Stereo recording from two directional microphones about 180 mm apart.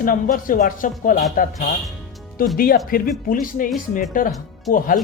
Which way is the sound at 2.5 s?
55° left (ahead or behind).